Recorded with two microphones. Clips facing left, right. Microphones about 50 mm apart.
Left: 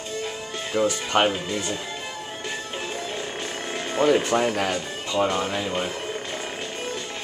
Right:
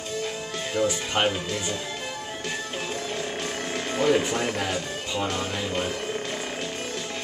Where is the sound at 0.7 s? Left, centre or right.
Centre.